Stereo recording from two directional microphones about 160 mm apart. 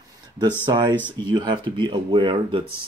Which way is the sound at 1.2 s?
30° right (ahead or behind).